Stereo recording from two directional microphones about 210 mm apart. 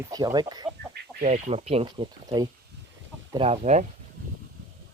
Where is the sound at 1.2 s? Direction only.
30° right (ahead or behind).